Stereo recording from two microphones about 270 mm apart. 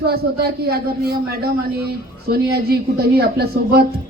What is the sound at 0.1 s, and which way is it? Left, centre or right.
A woman's voice, right.